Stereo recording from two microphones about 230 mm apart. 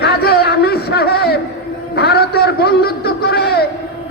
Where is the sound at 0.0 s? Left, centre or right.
Left.